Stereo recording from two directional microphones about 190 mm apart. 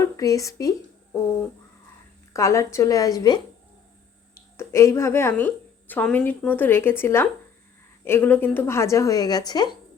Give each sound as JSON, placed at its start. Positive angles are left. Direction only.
{"t": 0.0, "sound": "speech", "side_deg": 15}
{"t": 2.3, "sound": "a woman's voice", "side_deg": 15}